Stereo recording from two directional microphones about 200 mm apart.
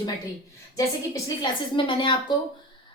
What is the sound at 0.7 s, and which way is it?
A woman's voice, 15° left (ahead or behind).